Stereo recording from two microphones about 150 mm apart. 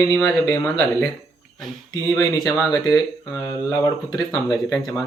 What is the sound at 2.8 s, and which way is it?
Speech, 25° left (ahead or behind).